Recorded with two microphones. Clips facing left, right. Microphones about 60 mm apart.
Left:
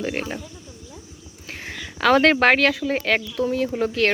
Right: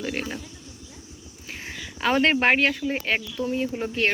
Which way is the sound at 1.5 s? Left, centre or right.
Left.